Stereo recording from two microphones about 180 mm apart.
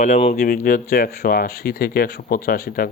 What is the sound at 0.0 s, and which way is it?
Speech, 40° left (ahead or behind).